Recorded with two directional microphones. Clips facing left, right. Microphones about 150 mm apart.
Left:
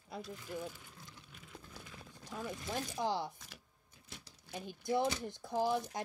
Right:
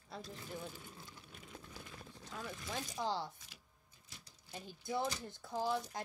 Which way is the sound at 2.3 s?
15° left (ahead or behind).